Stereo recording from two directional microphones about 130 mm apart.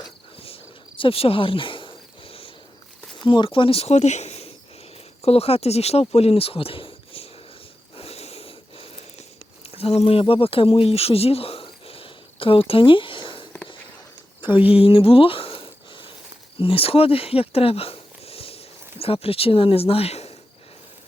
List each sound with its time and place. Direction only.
0.3 s cricket: 45° left (ahead or behind)
3.2 s speech: 40° left (ahead or behind)
7.9 s wheeze: 50° left (ahead or behind)
9.7 s speech: 50° left (ahead or behind)
14.8 s a sound: 45° left (ahead or behind)
16.6 s speech: 45° left (ahead or behind)